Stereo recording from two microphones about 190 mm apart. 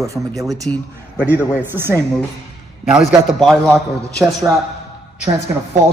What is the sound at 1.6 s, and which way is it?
A man's voice, 10° right (ahead or behind).